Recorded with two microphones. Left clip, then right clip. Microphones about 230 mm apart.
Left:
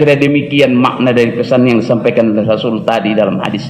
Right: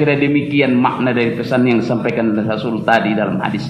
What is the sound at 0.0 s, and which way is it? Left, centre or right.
A man's voice, left.